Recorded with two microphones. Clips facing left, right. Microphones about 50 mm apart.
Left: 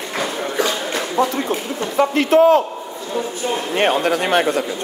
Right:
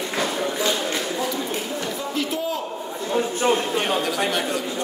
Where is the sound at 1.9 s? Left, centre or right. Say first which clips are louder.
Left 16 dB; left.